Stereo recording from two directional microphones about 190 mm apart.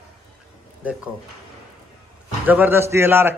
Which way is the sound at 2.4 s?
10° right (ahead or behind).